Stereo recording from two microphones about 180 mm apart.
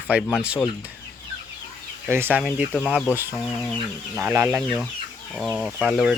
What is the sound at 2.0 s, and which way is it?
Speech, 10° right (ahead or behind).